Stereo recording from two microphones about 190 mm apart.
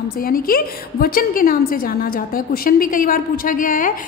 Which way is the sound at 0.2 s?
50° left (ahead or behind).